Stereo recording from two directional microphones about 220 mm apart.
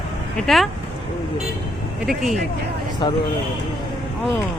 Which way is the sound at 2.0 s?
Centre (ahead or behind).